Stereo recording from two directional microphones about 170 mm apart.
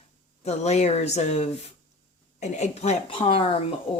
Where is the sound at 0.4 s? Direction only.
40° left (ahead or behind).